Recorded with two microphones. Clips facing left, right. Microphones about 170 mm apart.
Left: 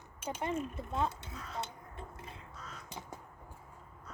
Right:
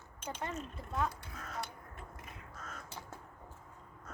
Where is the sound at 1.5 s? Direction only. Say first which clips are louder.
Left 3 dB; 25° left (ahead or behind).